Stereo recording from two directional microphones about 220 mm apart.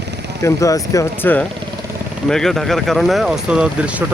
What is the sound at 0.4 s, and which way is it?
Speech, 15° left (ahead or behind).